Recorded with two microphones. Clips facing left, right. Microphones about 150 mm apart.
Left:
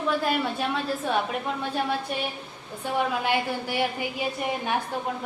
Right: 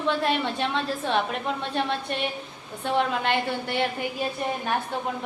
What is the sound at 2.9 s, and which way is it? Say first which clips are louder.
A woman's voice: right 1 dB; 10° left (ahead or behind).